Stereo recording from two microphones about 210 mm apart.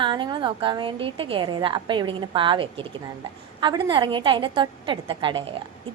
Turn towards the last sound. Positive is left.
turn(degrees=-25)  # may be behind; listen again after turning